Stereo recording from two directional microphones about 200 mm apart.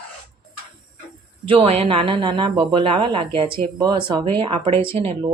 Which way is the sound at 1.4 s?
30° right (ahead or behind).